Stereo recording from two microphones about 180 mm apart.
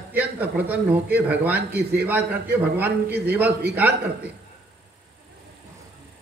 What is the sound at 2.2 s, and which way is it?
Speech, 65° right (ahead or behind).